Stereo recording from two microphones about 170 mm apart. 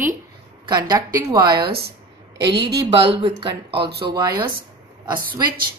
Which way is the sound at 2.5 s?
90° right.